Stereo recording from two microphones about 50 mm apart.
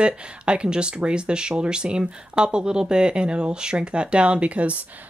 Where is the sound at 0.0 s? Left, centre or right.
Right.